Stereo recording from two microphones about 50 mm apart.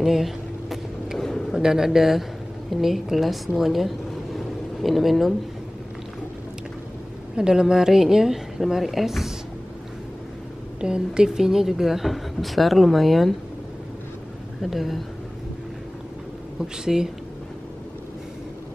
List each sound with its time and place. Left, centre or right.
0.0 s vehicle: centre
1.5 s a woman's voice: centre
7.3 s a woman's voice: centre
10.8 s a woman's voice: centre
14.6 s speech: centre
16.6 s a woman's voice: centre